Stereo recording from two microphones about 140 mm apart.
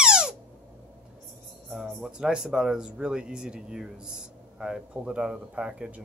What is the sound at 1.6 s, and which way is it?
Speech, 5° right (ahead or behind).